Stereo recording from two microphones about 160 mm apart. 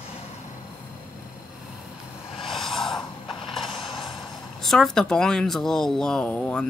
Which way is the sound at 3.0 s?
30° left (ahead or behind).